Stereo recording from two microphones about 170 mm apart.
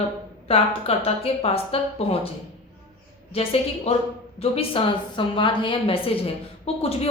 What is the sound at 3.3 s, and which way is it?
A woman's voice, 35° left (ahead or behind).